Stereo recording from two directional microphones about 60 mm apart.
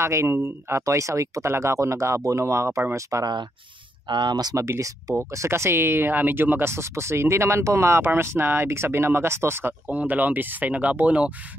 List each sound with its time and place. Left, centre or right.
0.0 s speech: right
2.9 s speech: right
4.4 s speech: right
4.6 s speech: right
5.3 s speech: right
6.7 s speech: right
9.8 s speech: right